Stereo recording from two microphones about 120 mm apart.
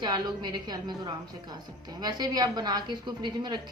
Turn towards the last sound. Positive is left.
turn(degrees=-40)  # may be behind; listen again after turning